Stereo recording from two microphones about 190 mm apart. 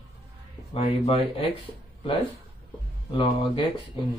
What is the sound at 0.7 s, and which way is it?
Speech, 30° left (ahead or behind).